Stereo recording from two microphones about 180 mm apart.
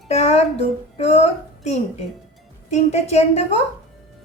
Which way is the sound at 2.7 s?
35° left (ahead or behind).